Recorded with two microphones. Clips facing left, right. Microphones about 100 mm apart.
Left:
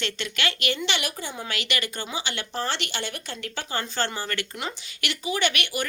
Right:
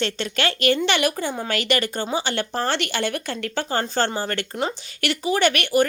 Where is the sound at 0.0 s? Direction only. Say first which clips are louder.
Right 6 dB; 40° right (ahead or behind).